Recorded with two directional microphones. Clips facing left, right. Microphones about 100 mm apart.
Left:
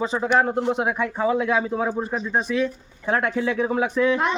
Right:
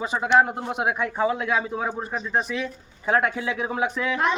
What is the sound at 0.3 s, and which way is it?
A woman's voice, 10° right (ahead or behind).